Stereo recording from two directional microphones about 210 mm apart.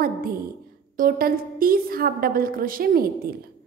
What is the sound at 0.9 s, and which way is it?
A woman's voice, 40° right (ahead or behind).